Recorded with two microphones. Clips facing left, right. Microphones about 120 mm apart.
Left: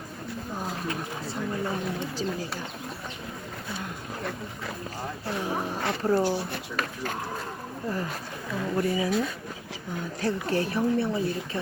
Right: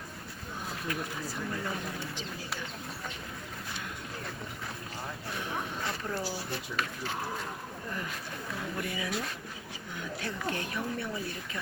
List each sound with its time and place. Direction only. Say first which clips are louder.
0.9 s speech: left 3 dB; 25° left (ahead or behind)
5.4 s speech: left 6 dB; 35° left (ahead or behind)
6.7 s speech: left 5 dB; 50° left (ahead or behind)
8.7 s speech: left 11 dB; 35° left (ahead or behind)
10.2 s speech: left 9 dB; 35° left (ahead or behind)